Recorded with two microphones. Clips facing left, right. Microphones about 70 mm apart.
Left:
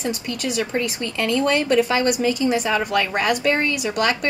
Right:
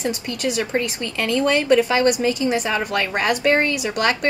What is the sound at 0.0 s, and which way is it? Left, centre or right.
Speech, right.